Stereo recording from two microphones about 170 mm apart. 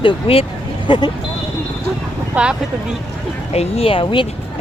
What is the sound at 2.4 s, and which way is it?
Speech, 10° right (ahead or behind).